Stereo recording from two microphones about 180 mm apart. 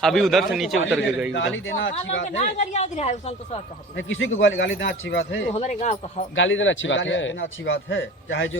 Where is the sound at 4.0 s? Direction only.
90° left.